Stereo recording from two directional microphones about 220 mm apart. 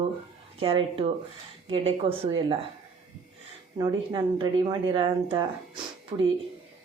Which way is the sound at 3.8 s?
20° right (ahead or behind).